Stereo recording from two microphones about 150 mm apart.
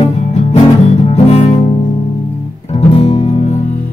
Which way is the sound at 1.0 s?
40° left (ahead or behind).